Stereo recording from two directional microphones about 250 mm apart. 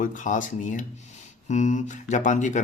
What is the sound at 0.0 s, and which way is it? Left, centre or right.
Speech, left.